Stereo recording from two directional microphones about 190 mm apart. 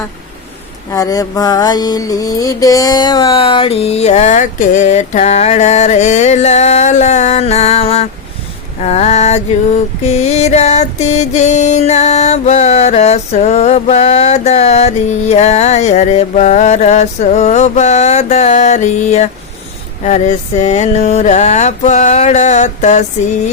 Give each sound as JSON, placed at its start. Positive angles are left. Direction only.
{"t": 0.9, "sound": "music", "side_deg": 20}